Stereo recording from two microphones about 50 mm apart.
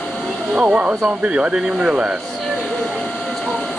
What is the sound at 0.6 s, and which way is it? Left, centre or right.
Speech, right.